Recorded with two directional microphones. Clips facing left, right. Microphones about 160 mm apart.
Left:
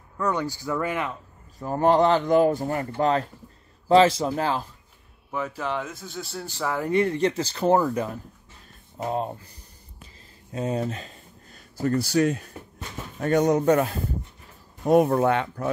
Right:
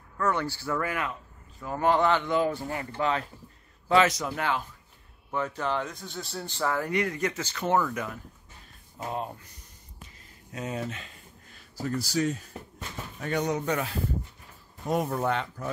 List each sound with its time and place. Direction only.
0.2 s speech: 15° left (ahead or behind)
1.6 s speech: 35° left (ahead or behind)
5.3 s speech: 5° left (ahead or behind)
6.9 s speech: 30° left (ahead or behind)
10.5 s a sound: 30° left (ahead or behind)
11.7 s speech: 55° left (ahead or behind)
13.2 s speech: 45° left (ahead or behind)
14.9 s speech: 55° left (ahead or behind)